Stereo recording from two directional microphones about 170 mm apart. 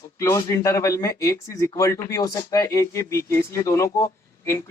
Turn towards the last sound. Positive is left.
turn(degrees=20)  # may be behind; listen again after turning